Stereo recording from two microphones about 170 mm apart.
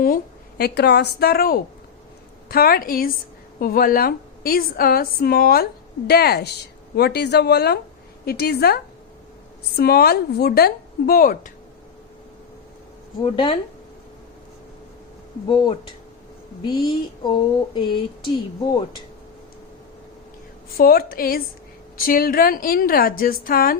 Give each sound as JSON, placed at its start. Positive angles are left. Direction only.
{"t": 0.6, "sound": "a woman's voice", "side_deg": 70}
{"t": 13.2, "sound": "speech", "side_deg": 30}
{"t": 15.4, "sound": "mantra", "side_deg": 25}
{"t": 20.7, "sound": "a woman's voice", "side_deg": 60}